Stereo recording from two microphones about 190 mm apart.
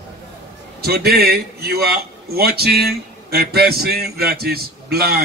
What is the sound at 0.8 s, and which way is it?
A man's voice, 55° right (ahead or behind).